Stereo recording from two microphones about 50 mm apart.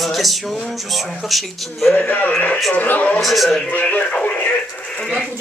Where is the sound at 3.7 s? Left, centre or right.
Left.